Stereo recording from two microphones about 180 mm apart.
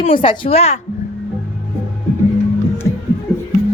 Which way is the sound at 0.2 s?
30° left (ahead or behind).